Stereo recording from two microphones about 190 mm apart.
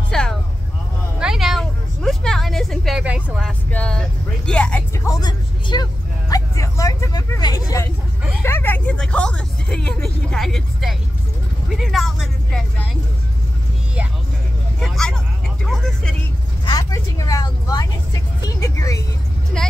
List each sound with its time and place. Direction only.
0.1 s vehicle: 5° left (ahead or behind)
1.2 s a sound: centre (ahead or behind)
4.5 s vehicle: 5° left (ahead or behind)
8.4 s a sound: 15° left (ahead or behind)
11.7 s vehicle: centre (ahead or behind)
14.8 s vehicle: 5° left (ahead or behind)
16.6 s vehicle: 20° left (ahead or behind)
19.5 s vehicle: 5° left (ahead or behind)